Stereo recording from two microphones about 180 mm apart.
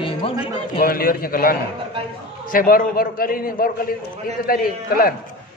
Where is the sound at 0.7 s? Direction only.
55° left (ahead or behind).